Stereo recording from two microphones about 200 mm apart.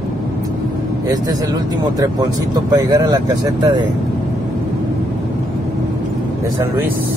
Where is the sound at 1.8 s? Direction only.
20° right (ahead or behind).